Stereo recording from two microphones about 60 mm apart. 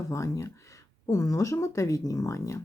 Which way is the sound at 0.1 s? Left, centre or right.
Left.